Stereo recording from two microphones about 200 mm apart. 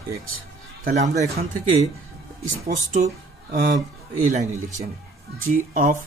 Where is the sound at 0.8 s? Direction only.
35° right (ahead or behind).